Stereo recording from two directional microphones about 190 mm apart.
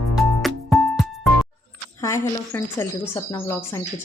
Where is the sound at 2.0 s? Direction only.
15° left (ahead or behind).